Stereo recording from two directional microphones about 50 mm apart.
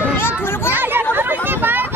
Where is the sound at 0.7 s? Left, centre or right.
Right.